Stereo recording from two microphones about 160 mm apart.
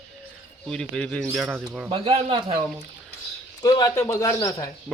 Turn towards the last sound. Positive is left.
turn(degrees=20)  # may be behind; listen again after turning